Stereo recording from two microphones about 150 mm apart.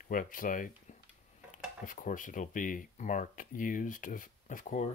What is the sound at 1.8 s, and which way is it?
Speech, 60° left (ahead or behind).